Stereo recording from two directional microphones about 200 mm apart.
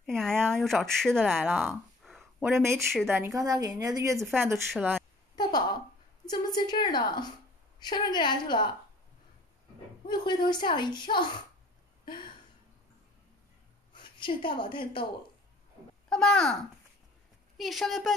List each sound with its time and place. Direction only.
0.0 s speech: centre (ahead or behind)
2.0 s a sound: centre (ahead or behind)
2.5 s a woman's voice: 15° right (ahead or behind)
5.3 s a sound: 20° left (ahead or behind)
6.3 s a woman's voice: 20° left (ahead or behind)
10.0 s a woman's voice: 20° left (ahead or behind)
12.0 s a sound: 25° left (ahead or behind)
13.9 s a woman's voice: 25° left (ahead or behind)
16.1 s speech: 5° left (ahead or behind)
17.6 s speech: centre (ahead or behind)